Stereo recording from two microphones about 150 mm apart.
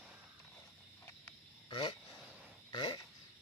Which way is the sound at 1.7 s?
30° left (ahead or behind).